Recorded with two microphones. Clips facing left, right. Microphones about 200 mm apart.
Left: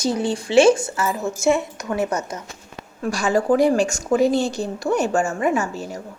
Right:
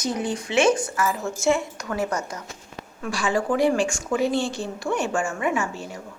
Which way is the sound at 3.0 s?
40° left (ahead or behind).